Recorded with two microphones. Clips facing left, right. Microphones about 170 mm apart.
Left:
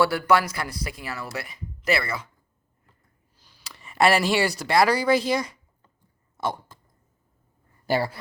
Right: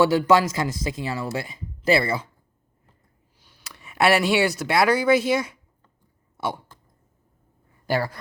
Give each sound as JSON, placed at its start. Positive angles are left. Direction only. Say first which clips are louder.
{"t": 0.0, "sound": "speech", "louder": "right 3 dB", "side_deg": -20}
{"t": 3.4, "sound": "speech", "louder": "even", "side_deg": 0}
{"t": 6.3, "sound": "cough", "louder": "even", "side_deg": -5}